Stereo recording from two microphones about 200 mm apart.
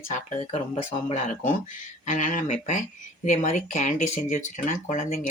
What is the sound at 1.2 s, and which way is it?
Speech, 40° left (ahead or behind).